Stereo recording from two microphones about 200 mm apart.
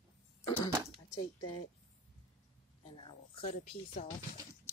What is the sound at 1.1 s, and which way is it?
Speech, 20° left (ahead or behind).